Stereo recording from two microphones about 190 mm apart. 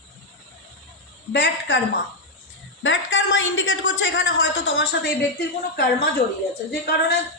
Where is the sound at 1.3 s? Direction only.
65° left (ahead or behind).